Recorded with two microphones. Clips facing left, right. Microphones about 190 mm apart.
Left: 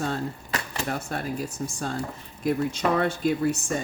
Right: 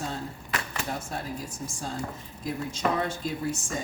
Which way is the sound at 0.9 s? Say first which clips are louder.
Left 6 dB; 65° left (ahead or behind).